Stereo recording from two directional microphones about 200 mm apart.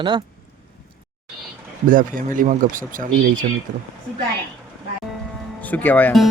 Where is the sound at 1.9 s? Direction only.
40° right (ahead or behind).